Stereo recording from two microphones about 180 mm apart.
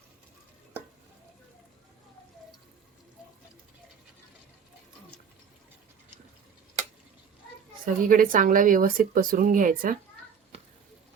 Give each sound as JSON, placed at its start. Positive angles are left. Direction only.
{"t": 7.9, "sound": "speech", "side_deg": -50}